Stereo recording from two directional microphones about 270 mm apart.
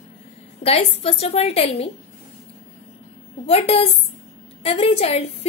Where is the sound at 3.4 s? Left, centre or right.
Left.